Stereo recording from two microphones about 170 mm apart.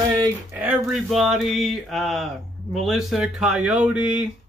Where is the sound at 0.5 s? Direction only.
10° right (ahead or behind).